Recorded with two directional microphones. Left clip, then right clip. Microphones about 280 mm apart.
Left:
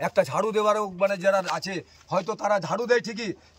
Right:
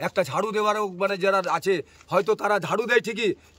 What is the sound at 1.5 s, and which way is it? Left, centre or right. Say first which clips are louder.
Speech: right 6 dB; right.